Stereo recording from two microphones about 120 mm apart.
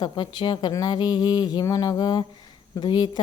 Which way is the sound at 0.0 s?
40° left (ahead or behind).